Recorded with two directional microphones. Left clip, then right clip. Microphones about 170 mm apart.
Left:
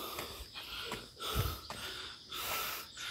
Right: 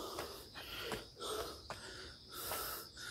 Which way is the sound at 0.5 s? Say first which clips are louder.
Left 3 dB; 35° right (ahead or behind).